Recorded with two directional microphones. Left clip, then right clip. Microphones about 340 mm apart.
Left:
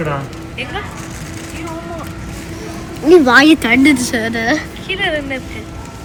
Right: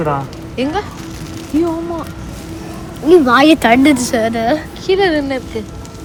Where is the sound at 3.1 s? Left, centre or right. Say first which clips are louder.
Left 1 dB; centre.